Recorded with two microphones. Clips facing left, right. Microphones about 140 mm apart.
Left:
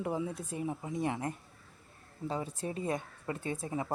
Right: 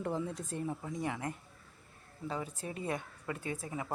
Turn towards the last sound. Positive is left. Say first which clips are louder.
# left 3 dB
turn(degrees=25)  # may be behind; listen again after turning